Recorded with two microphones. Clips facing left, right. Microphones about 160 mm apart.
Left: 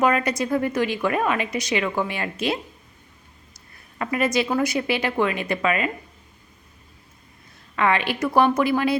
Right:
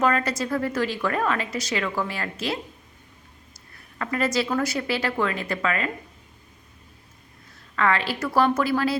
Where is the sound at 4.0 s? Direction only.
20° left (ahead or behind).